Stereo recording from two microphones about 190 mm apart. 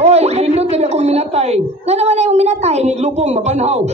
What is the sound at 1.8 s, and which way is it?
Speech, 35° right (ahead or behind).